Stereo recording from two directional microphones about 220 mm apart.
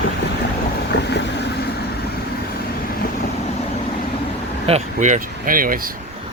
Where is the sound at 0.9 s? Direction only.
50° left (ahead or behind).